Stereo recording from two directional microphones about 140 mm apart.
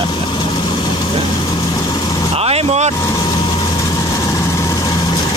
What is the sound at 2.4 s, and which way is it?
Vehicle, 45° right (ahead or behind).